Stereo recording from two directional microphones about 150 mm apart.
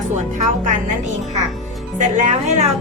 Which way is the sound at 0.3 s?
55° right (ahead or behind).